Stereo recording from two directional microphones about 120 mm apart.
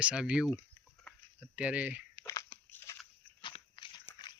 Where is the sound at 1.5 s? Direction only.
10° right (ahead or behind).